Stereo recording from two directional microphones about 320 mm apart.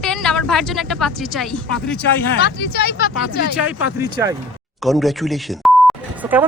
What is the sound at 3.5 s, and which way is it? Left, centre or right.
Speech, centre.